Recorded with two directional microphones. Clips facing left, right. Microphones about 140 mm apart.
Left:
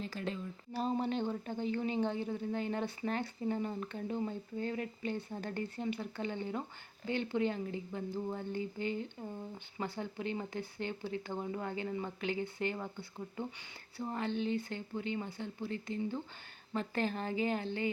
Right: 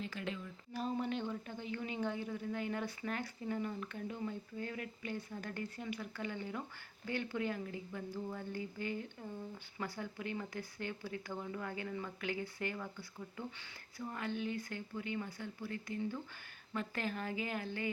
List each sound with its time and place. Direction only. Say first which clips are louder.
0.0 s speech: left 3 dB; 35° left (ahead or behind)